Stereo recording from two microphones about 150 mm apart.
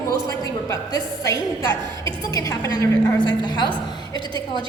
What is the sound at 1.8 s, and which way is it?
Speech, 30° right (ahead or behind).